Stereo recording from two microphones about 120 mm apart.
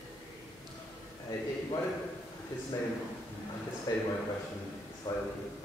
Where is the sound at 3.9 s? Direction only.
30° left (ahead or behind).